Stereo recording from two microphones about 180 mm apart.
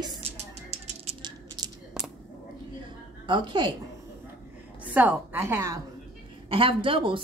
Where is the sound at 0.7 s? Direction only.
30° right (ahead or behind).